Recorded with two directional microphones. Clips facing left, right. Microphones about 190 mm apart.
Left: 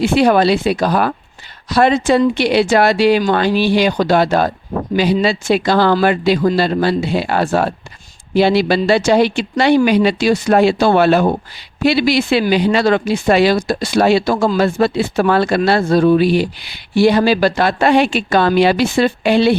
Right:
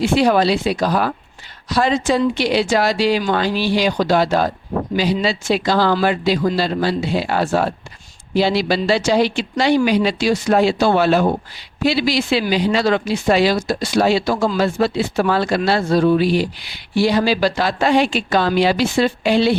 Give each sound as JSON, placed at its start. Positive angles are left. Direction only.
{"t": 0.0, "sound": "speech", "side_deg": 60}